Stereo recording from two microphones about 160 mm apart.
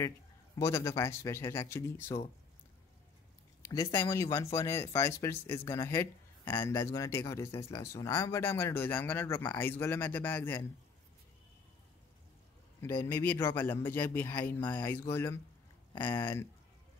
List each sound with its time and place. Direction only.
0.6 s speech: 20° left (ahead or behind)
3.6 s speech: 20° left (ahead or behind)
13.0 s speech: 10° left (ahead or behind)
15.9 s speech: 30° left (ahead or behind)